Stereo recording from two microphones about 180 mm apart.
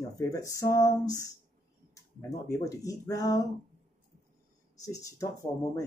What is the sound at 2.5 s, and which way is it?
Speech, 20° left (ahead or behind).